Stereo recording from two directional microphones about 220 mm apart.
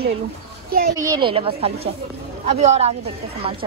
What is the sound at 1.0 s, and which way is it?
A woman's voice, 15° right (ahead or behind).